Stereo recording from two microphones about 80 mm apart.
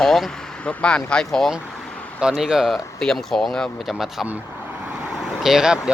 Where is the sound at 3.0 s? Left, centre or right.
Centre.